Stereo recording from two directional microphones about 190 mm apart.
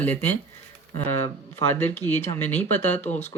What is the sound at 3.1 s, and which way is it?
Speech, 35° left (ahead or behind).